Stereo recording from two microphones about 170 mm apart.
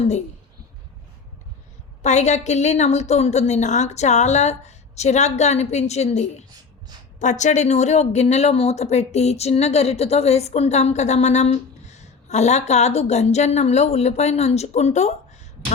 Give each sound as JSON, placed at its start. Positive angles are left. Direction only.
{"t": 2.0, "sound": "speech", "side_deg": 40}